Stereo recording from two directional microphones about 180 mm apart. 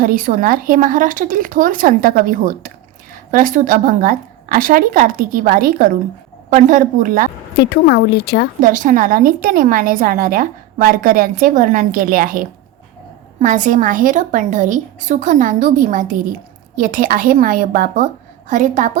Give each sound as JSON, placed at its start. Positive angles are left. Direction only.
{"t": 0.0, "sound": "a woman's voice", "side_deg": -50}
{"t": 7.5, "sound": "speech", "side_deg": 60}
{"t": 8.6, "sound": "a woman's voice", "side_deg": -45}